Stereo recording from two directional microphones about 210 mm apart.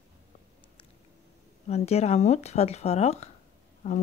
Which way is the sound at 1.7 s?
30° left (ahead or behind).